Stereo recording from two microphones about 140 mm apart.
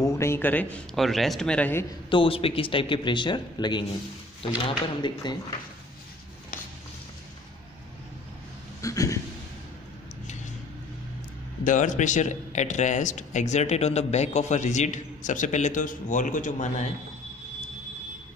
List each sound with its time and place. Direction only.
0.0 s a man's voice: 20° left (ahead or behind)
2.0 s speech: 40° left (ahead or behind)
8.8 s a sound: 25° left (ahead or behind)
11.6 s speech: 65° left (ahead or behind)